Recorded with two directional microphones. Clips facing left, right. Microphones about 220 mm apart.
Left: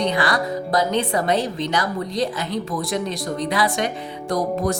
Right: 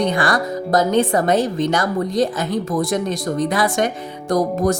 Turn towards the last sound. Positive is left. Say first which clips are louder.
# right 4 dB
turn(degrees=-45)  # may be behind; listen again after turning